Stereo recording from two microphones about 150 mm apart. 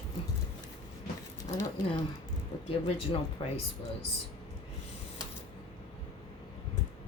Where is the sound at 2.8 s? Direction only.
40° left (ahead or behind).